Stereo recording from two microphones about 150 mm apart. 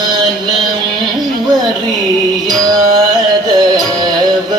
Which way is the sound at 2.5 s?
25° right (ahead or behind).